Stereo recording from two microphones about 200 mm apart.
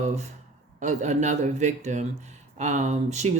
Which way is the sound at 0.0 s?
35° right (ahead or behind).